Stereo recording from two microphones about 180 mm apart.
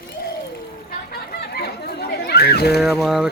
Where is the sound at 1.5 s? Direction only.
60° left (ahead or behind).